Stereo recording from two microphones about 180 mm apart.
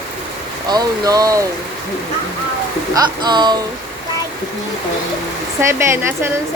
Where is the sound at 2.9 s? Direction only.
25° right (ahead or behind).